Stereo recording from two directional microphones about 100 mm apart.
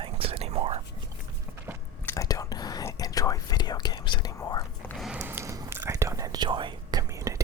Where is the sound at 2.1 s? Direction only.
35° left (ahead or behind).